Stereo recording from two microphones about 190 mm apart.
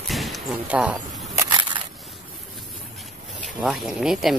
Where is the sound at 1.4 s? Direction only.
25° right (ahead or behind).